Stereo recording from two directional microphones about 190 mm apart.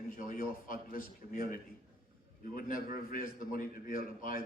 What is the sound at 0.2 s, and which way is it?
A man's voice, 45° left (ahead or behind).